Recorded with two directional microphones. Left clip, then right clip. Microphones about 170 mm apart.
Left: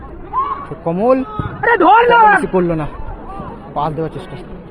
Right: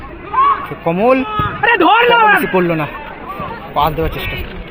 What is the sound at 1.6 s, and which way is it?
Speech, 55° right (ahead or behind).